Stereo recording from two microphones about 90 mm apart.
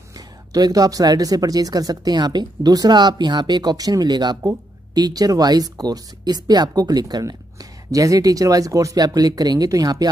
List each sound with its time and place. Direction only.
0.5 s speech: 45° right (ahead or behind)